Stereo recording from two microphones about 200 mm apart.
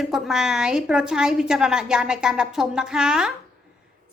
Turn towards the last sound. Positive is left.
turn(degrees=-5)  # may be behind; listen again after turning